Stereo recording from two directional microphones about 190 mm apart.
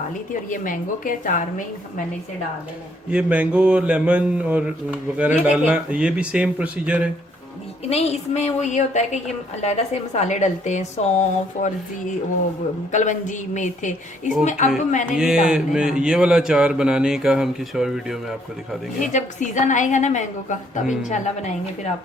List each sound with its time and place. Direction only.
0.5 s a woman's voice: 45° left (ahead or behind)
3.1 s speech: 5° right (ahead or behind)
7.9 s a woman's voice: 35° left (ahead or behind)
12.9 s a woman's voice: 40° left (ahead or behind)
15.1 s speech: 5° right (ahead or behind)
19.0 s a woman's voice: 40° left (ahead or behind)